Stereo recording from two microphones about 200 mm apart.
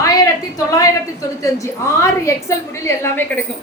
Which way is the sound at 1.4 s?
15° left (ahead or behind).